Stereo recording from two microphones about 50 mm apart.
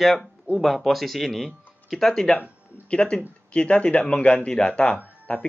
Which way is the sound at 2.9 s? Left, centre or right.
Left.